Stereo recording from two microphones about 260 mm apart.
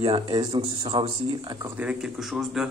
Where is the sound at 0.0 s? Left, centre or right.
Centre.